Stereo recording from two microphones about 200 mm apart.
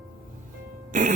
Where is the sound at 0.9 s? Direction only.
40° right (ahead or behind).